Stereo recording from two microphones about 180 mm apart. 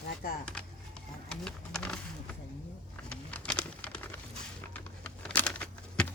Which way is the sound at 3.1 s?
5° left (ahead or behind).